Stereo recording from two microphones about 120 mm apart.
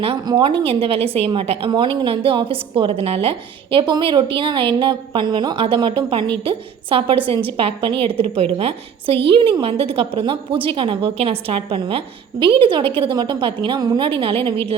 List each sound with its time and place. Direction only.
0.3 s a woman's voice: 40° right (ahead or behind)